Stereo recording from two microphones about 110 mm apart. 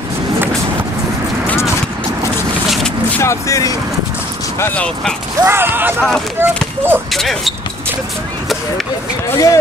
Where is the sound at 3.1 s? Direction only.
25° left (ahead or behind).